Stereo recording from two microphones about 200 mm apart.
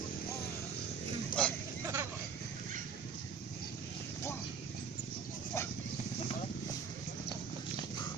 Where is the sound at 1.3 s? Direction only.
45° left (ahead or behind).